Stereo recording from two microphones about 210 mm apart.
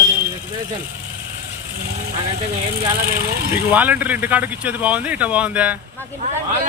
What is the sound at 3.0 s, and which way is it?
Speech, 45° right (ahead or behind).